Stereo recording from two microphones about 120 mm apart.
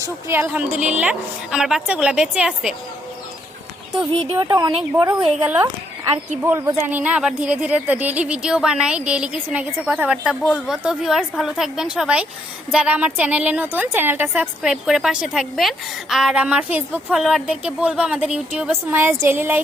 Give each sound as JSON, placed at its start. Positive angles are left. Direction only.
{"t": 0.0, "sound": "a woman's voice", "side_deg": -20}
{"t": 4.4, "sound": "a woman's voice", "side_deg": -30}
{"t": 6.4, "sound": "a woman's voice", "side_deg": -20}